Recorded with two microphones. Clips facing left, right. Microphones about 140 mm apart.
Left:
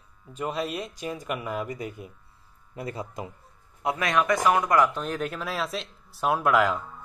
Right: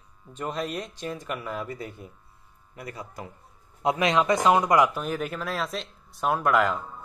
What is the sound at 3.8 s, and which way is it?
Speech, 20° right (ahead or behind).